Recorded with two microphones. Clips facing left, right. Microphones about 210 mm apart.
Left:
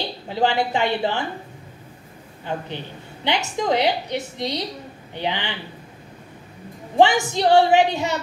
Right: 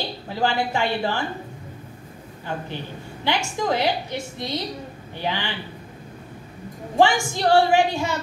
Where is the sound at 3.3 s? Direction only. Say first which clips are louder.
Left 2 dB; 20° left (ahead or behind).